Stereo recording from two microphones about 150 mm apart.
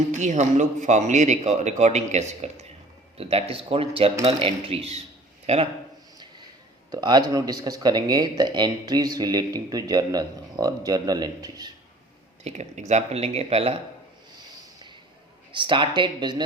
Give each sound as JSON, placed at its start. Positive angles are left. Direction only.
{"t": 0.1, "sound": "speech", "side_deg": -50}
{"t": 6.9, "sound": "speech", "side_deg": -30}
{"t": 12.5, "sound": "speech", "side_deg": -50}
{"t": 15.5, "sound": "speech", "side_deg": -30}